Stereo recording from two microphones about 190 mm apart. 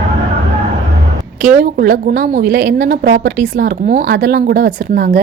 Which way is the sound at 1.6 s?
45° right (ahead or behind).